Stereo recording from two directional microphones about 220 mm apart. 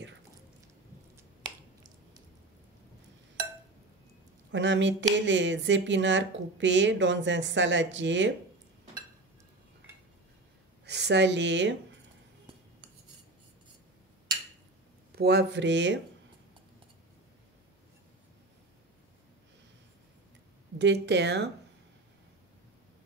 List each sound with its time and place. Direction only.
1.1 s finger snapping: 15° right (ahead or behind)
4.5 s a woman's voice: 55° right (ahead or behind)
10.9 s speech: 50° right (ahead or behind)
15.1 s speech: 50° right (ahead or behind)
20.7 s speech: 55° right (ahead or behind)